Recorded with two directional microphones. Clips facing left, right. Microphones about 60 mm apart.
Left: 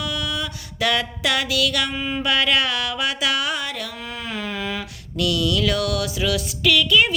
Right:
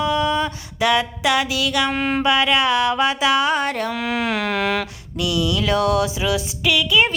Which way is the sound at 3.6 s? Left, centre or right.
Right.